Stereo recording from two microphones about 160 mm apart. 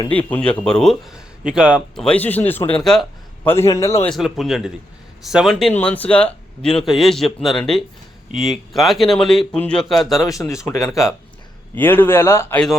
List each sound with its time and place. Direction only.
0.1 s speech: 10° left (ahead or behind)
2.0 s speech: 10° left (ahead or behind)
2.8 s speech: centre (ahead or behind)
3.4 s speech: 15° left (ahead or behind)
4.0 s speech: centre (ahead or behind)
10.2 s speech: 20° left (ahead or behind)